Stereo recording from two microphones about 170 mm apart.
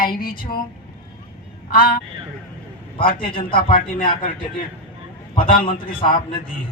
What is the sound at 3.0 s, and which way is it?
Speech, 30° left (ahead or behind).